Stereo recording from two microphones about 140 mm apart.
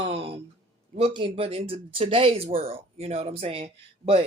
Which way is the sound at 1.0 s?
40° right (ahead or behind).